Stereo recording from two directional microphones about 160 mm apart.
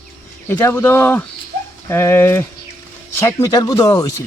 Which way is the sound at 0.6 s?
15° left (ahead or behind).